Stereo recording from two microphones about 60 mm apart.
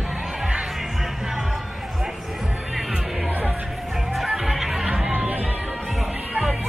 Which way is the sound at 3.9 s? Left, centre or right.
Centre.